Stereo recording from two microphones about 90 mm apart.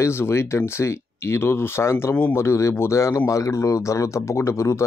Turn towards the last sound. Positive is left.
turn(degrees=30)  # may be behind; listen again after turning